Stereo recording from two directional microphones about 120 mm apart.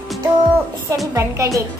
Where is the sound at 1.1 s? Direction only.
25° right (ahead or behind).